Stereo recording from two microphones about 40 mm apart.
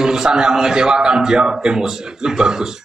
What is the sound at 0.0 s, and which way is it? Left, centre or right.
A man's voice, centre.